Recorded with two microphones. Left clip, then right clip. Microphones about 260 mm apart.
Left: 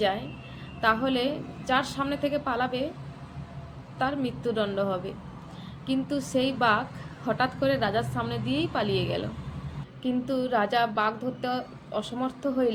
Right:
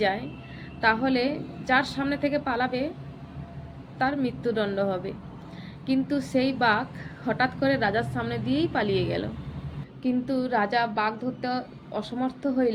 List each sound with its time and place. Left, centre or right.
0.0 s a woman's voice: centre
3.9 s a woman's voice: centre